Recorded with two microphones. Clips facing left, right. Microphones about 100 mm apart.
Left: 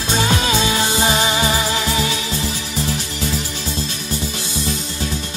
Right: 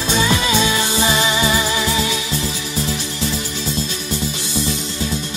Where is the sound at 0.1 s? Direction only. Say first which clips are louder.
Even; 45° left (ahead or behind).